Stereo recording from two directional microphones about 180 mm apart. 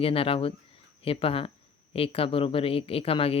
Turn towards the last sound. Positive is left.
turn(degrees=30)  # may be behind; listen again after turning